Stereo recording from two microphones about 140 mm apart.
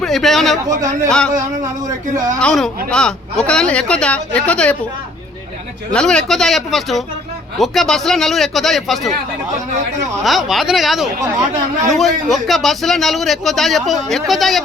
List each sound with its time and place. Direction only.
0.0 s a man's voice: centre (ahead or behind)
2.4 s speech: 5° left (ahead or behind)
5.9 s a man's voice: 5° left (ahead or behind)
10.2 s a man's voice: centre (ahead or behind)
11.2 s speech: 25° right (ahead or behind)
11.9 s a man's voice: centre (ahead or behind)